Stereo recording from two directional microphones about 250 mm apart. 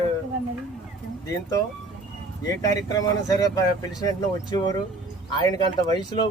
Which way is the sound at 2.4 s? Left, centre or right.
Centre.